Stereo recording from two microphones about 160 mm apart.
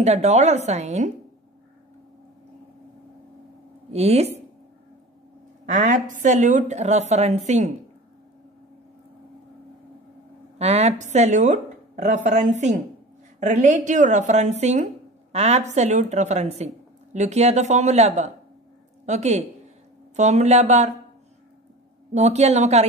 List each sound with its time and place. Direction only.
0.0 s speech: 45° right (ahead or behind)
3.9 s speech: 40° right (ahead or behind)
5.7 s speech: 50° right (ahead or behind)
10.6 s speech: 45° right (ahead or behind)
22.1 s speech: 45° right (ahead or behind)